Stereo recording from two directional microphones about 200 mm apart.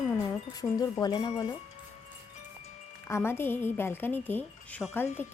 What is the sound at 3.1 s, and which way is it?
A woman's voice, 10° left (ahead or behind).